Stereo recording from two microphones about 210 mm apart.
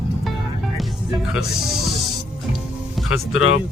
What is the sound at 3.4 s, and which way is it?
Speech, 70° left (ahead or behind).